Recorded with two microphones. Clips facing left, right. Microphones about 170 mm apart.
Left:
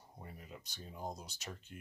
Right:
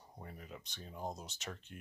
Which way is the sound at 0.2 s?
Centre (ahead or behind).